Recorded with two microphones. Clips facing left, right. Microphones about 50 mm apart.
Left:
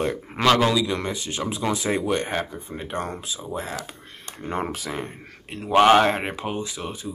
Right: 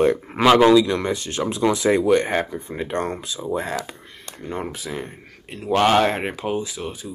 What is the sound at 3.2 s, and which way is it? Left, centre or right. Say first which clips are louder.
Speech: right 5 dB; centre.